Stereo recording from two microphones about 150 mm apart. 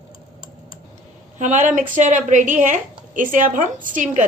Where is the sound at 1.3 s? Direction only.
55° right (ahead or behind).